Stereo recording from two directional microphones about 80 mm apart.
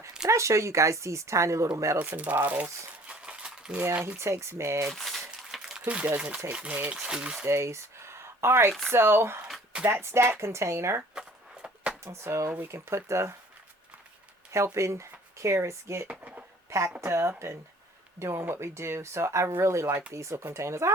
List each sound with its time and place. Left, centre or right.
0.3 s speech: right
2.0 s speech: right
3.1 s a sound: centre
4.2 s speech: right
4.9 s crumpling: centre
5.9 s speech: centre
7.4 s speech: right
11.1 s a sound: centre
12.0 s speech: right
14.5 s speech: right
16.0 s speech: centre
16.6 s speech: right